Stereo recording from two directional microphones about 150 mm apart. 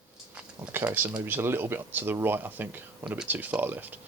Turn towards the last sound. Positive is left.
turn(degrees=-10)  # may be behind; listen again after turning